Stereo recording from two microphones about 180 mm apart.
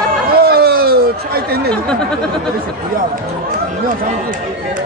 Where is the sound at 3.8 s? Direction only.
50° right (ahead or behind).